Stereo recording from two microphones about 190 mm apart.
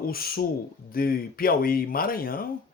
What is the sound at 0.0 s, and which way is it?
Speech, 50° left (ahead or behind).